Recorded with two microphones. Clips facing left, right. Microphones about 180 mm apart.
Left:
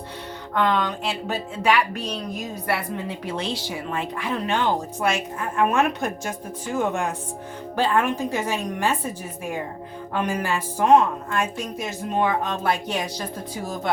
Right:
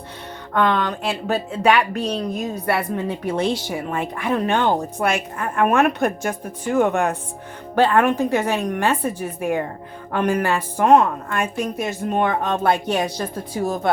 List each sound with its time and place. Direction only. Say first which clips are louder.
0.5 s a woman's voice: right 3 dB; 55° right (ahead or behind)
13.6 s speech: right 10 dB; 45° right (ahead or behind)